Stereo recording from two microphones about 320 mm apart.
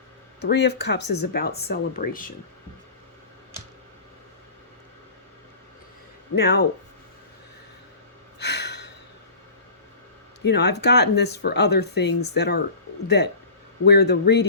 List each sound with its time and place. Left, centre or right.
0.4 s speech: left
6.3 s speech: left
8.4 s a sound: left
10.4 s speech: left